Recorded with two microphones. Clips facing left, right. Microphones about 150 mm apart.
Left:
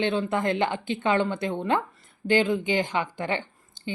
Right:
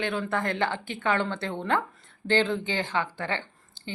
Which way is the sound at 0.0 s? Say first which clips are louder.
Left 4 dB; 25° left (ahead or behind).